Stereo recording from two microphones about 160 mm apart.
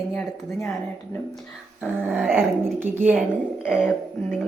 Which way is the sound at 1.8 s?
5° right (ahead or behind).